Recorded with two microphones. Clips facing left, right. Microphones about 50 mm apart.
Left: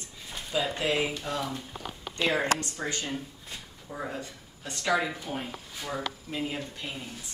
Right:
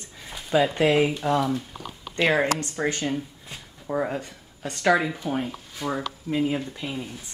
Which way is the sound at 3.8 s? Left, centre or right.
Right.